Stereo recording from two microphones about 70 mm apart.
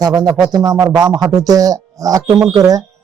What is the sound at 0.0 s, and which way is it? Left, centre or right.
Mantra, right.